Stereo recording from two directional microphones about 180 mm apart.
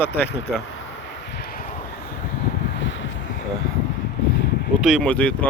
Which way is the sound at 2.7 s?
90° left.